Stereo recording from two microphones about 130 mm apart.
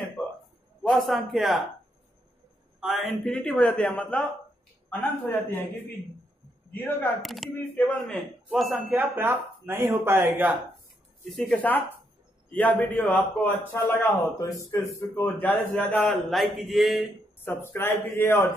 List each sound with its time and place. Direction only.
0.8 s speech: centre (ahead or behind)
2.8 s a man's voice: centre (ahead or behind)
5.3 s a man's voice: 15° left (ahead or behind)
7.2 s speech: centre (ahead or behind)
7.5 s a man's voice: 15° left (ahead or behind)
8.5 s speech: centre (ahead or behind)
8.9 s speech: 15° right (ahead or behind)
11.2 s a man's voice: 5° left (ahead or behind)
16.1 s speech: centre (ahead or behind)
17.4 s a man's voice: 15° left (ahead or behind)